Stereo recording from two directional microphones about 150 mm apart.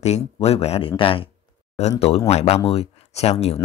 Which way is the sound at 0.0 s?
45° left (ahead or behind).